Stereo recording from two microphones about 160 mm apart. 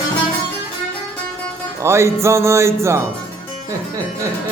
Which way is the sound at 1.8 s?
15° right (ahead or behind).